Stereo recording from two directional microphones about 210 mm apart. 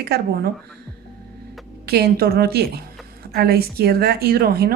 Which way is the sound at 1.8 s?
50° right (ahead or behind).